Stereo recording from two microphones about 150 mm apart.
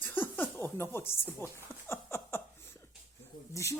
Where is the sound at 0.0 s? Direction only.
15° left (ahead or behind).